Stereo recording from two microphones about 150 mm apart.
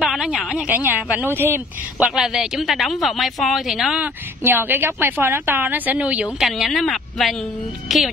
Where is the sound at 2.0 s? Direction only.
5° right (ahead or behind).